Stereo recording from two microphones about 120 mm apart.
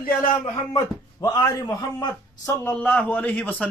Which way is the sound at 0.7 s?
30° left (ahead or behind).